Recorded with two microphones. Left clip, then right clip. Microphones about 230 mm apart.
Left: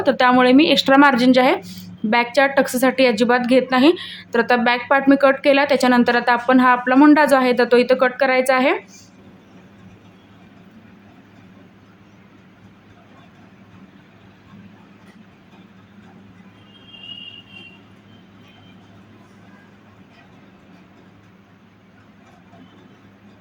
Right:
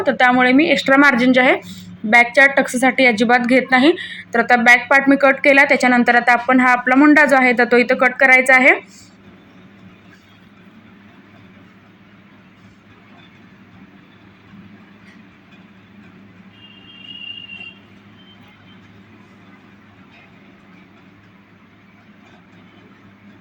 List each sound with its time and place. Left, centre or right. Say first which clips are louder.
0.0 s speech: right 1 dB; centre